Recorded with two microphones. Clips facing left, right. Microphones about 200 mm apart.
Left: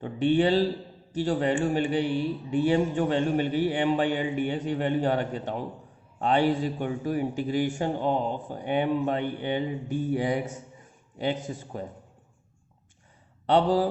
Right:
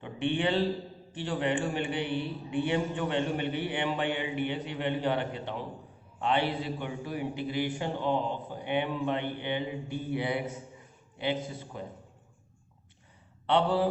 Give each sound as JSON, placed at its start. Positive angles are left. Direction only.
{"t": 0.0, "sound": "a man's voice", "side_deg": 40}
{"t": 13.5, "sound": "a man's voice", "side_deg": 40}